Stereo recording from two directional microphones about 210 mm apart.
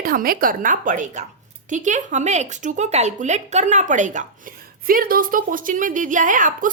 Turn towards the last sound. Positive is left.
turn(degrees=-40)  # may be behind; listen again after turning